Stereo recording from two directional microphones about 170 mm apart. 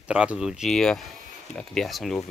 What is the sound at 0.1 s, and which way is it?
Speech, 5° right (ahead or behind).